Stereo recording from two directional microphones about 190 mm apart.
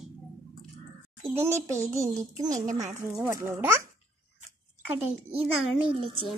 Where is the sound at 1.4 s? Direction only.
15° right (ahead or behind).